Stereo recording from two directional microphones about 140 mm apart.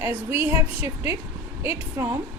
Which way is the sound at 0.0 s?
15° right (ahead or behind).